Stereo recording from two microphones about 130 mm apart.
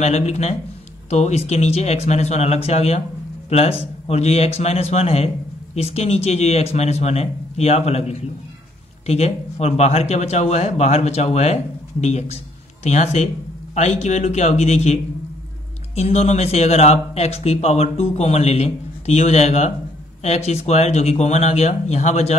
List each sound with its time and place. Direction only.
0.0 s speech: 55° left (ahead or behind)